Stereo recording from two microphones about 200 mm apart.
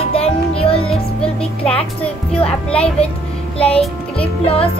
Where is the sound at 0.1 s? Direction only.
30° left (ahead or behind).